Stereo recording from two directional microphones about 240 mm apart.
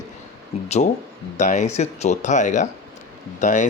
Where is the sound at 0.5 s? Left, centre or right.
Left.